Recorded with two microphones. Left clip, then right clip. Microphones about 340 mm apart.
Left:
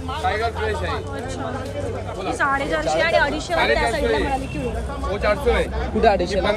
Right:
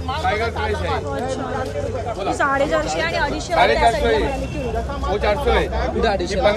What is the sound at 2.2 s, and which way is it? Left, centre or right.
A woman's voice, centre.